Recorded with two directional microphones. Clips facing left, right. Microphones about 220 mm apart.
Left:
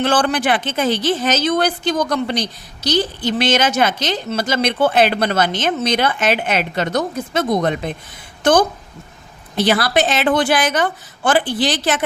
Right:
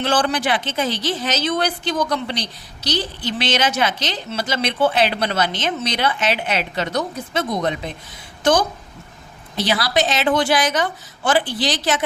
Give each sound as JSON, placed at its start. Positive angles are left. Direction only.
{"t": 0.0, "sound": "speech", "side_deg": 50}
{"t": 9.6, "sound": "speech", "side_deg": 55}